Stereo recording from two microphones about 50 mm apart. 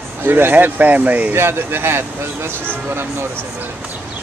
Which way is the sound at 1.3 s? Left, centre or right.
Right.